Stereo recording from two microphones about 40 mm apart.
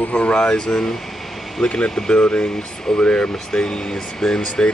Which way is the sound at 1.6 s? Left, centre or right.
Left.